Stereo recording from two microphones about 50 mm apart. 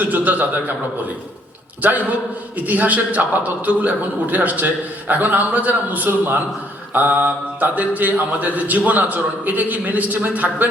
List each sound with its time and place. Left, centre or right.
0.0 s a man's voice: right
1.8 s a man's voice: right